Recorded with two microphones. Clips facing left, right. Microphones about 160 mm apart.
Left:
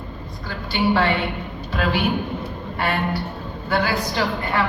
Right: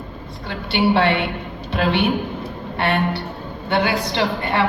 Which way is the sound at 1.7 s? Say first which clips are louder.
Right 3 dB; 25° right (ahead or behind).